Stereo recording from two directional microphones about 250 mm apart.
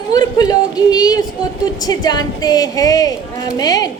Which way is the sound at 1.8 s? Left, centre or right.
Centre.